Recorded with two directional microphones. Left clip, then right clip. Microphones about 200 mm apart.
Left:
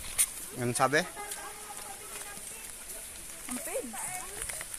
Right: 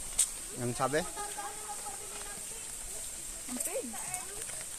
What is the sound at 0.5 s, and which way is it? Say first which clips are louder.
Speech: left 5 dB; 65° left (ahead or behind).